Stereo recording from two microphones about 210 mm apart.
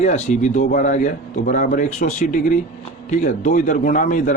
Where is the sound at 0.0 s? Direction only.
35° left (ahead or behind).